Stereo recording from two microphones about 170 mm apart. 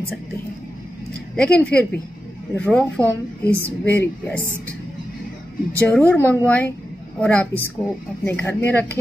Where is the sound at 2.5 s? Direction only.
5° left (ahead or behind).